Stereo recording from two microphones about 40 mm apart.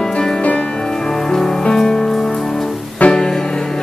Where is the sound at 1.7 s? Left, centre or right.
Centre.